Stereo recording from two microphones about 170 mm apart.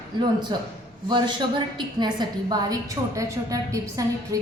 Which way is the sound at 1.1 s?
25° right (ahead or behind).